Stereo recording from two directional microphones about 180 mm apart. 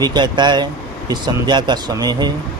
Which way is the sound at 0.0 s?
25° right (ahead or behind).